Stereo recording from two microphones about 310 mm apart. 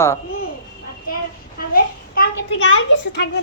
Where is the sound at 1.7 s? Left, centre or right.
Left.